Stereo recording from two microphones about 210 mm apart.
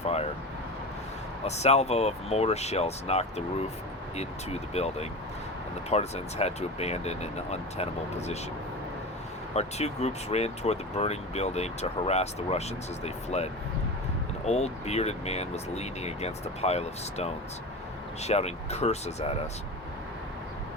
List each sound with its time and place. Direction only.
0.0 s vehicle: 30° left (ahead or behind)
1.5 s speech: 30° left (ahead or behind)
9.6 s speech: 30° left (ahead or behind)